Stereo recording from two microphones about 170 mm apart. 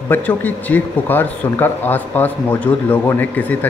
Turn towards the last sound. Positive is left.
turn(degrees=10)  # may be behind; listen again after turning